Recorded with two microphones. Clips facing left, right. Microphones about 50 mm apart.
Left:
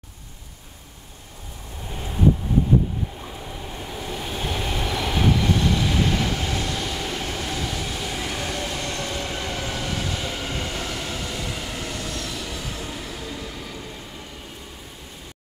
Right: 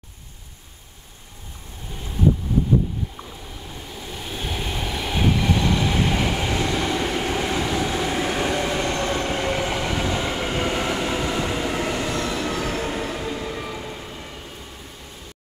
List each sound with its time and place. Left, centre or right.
3.8 s train: centre
4.3 s train: centre
5.3 s train: centre